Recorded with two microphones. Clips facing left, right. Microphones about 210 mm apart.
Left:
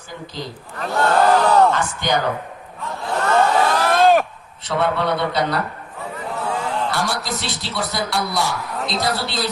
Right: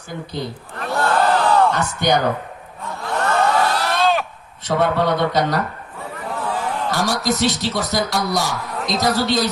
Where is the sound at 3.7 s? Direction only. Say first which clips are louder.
Left 4 dB; 50° left (ahead or behind).